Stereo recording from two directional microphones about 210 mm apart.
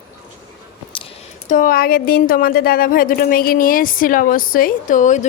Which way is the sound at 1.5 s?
40° left (ahead or behind).